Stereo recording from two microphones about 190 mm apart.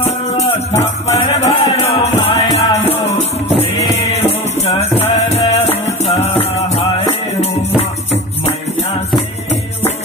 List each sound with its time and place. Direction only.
0.0 s music: 35° left (ahead or behind)